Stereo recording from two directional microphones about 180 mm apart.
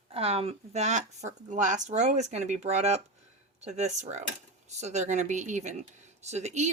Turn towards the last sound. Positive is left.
turn(degrees=-40)  # may be behind; listen again after turning